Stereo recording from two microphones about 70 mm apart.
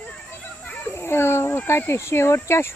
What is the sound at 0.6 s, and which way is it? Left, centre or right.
Speech, left.